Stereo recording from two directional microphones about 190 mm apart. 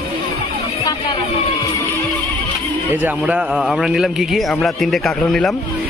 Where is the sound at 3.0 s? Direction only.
10° right (ahead or behind).